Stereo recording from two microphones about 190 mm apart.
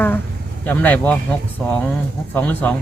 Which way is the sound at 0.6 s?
10° left (ahead or behind).